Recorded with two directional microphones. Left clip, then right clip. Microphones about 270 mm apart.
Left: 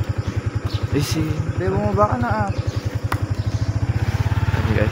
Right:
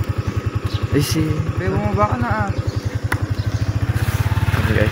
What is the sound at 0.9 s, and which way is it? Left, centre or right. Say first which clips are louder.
Speech: right 3 dB; centre.